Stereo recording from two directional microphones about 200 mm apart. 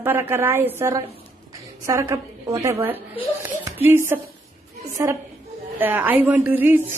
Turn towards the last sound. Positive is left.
turn(degrees=-10)  # may be behind; listen again after turning